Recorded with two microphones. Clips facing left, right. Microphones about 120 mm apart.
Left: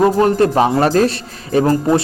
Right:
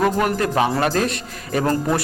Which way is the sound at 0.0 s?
30° left (ahead or behind).